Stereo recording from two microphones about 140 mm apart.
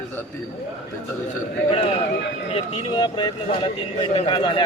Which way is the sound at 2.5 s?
35° left (ahead or behind).